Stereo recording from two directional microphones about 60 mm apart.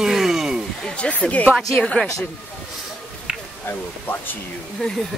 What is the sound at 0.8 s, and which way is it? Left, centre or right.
Speech, centre.